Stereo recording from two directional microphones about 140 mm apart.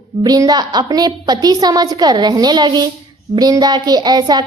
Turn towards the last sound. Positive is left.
turn(degrees=-30)  # may be behind; listen again after turning